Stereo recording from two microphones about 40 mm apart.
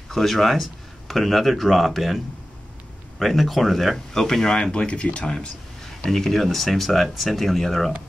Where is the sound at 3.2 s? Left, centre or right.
Centre.